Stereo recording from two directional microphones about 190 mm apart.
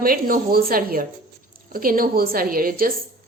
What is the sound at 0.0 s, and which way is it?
Speech, 50° right (ahead or behind).